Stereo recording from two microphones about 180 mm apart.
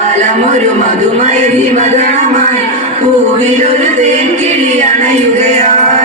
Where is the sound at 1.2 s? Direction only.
40° right (ahead or behind).